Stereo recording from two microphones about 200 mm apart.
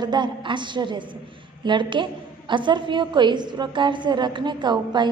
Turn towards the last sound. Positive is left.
turn(degrees=-20)  # may be behind; listen again after turning